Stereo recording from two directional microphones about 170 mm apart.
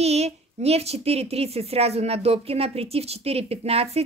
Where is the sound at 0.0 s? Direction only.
40° right (ahead or behind).